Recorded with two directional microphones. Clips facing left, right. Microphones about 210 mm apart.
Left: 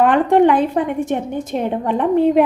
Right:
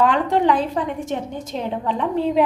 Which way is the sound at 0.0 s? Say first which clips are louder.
Left 5 dB; 55° left (ahead or behind).